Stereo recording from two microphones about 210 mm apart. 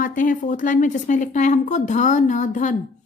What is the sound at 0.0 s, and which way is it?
A woman's voice, 40° left (ahead or behind).